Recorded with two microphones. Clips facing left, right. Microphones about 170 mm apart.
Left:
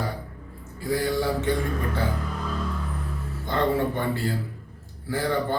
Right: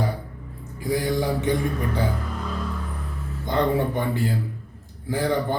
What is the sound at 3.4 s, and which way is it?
A man's voice, 15° right (ahead or behind).